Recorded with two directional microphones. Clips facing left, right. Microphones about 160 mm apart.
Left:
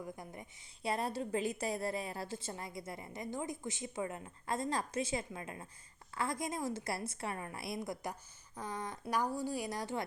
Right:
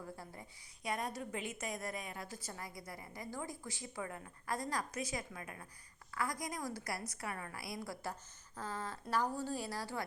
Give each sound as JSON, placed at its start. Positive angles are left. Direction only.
{"t": 0.0, "sound": "a woman's voice", "side_deg": 15}
{"t": 0.8, "sound": "a woman's voice", "side_deg": 30}